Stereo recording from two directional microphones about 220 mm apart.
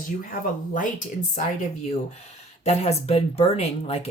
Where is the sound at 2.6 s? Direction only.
30° left (ahead or behind).